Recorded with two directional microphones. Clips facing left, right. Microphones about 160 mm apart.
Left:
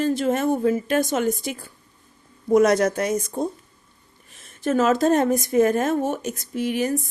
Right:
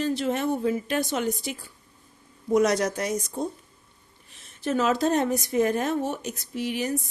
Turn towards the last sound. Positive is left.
turn(degrees=50)  # may be behind; listen again after turning